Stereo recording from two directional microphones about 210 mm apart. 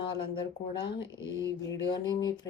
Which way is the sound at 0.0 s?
20° left (ahead or behind).